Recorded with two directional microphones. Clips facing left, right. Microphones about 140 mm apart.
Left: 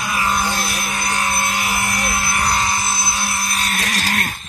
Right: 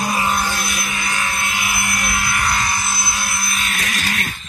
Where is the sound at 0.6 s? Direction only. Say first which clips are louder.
Left 2 dB; 35° left (ahead or behind).